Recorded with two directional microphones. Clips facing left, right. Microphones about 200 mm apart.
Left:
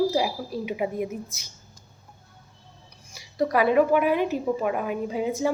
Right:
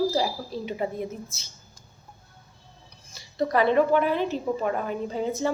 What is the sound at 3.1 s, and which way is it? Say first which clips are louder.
Speech: left 1 dB; 10° left (ahead or behind).